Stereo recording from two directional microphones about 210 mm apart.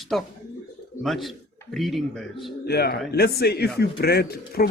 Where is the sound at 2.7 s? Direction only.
50° left (ahead or behind).